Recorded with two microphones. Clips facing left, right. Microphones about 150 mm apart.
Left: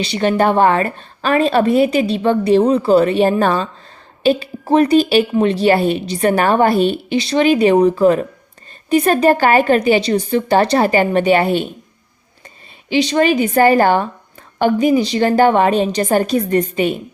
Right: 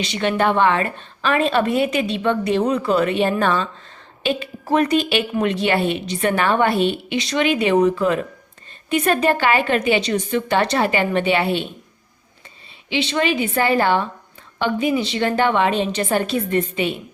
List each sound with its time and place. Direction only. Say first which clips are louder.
0.0 s a woman's voice: left 4 dB; 35° left (ahead or behind)
12.9 s a woman's voice: left 6 dB; 40° left (ahead or behind)